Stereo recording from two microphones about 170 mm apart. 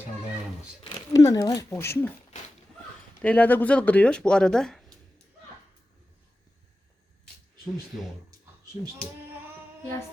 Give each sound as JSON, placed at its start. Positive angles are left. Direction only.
{"t": 0.9, "sound": "speech", "side_deg": 20}
{"t": 3.2, "sound": "speech", "side_deg": 10}